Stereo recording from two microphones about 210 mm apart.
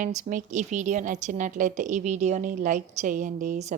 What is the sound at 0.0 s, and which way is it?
A woman's voice, 35° right (ahead or behind).